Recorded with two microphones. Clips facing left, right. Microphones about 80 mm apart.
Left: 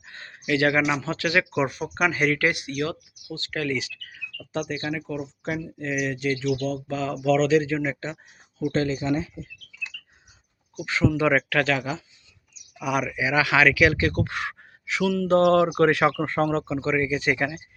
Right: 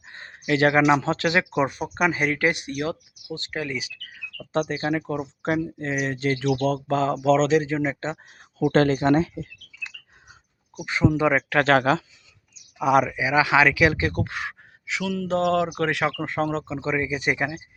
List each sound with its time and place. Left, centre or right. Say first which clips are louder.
0.1 s a sound: right 1 dB; right
0.4 s speech: right 3 dB; right
4.5 s speech: right 4 dB; right
8.6 s speech: right 6 dB; right
10.8 s speech: right 1 dB; right
11.8 s speech: right 9 dB; right
12.8 s speech: right 6 dB; right; by 16.8 s centre
16.8 s speech: right 1 dB; centre